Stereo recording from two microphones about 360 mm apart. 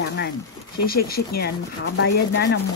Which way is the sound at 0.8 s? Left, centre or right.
Left.